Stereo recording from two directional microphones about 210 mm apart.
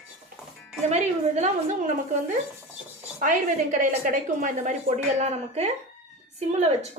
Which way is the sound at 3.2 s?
40° right (ahead or behind).